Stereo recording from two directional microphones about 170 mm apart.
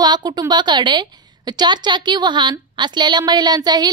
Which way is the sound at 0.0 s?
25° right (ahead or behind).